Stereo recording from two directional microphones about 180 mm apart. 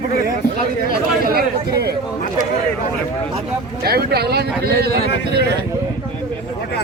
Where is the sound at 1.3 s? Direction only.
60° right (ahead or behind).